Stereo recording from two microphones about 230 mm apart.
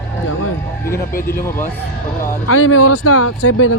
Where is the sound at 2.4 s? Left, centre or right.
Left.